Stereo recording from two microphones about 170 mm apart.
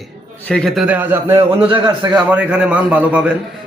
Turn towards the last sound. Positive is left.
turn(degrees=-5)  # may be behind; listen again after turning